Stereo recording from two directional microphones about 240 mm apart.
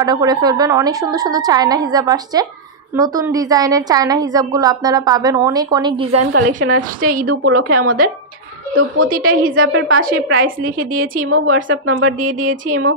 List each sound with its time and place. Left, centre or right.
0.0 s a woman's voice: centre
6.3 s a woman's voice: right
6.8 s a woman's voice: right
7.2 s a woman's voice: right
9.1 s a woman's voice: right
9.5 s a woman's voice: right
10.4 s a woman's voice: right
11.2 s a woman's voice: right
12.2 s a woman's voice: right